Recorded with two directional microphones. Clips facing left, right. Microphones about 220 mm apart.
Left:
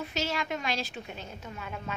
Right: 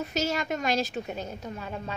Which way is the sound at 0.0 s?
45° right (ahead or behind).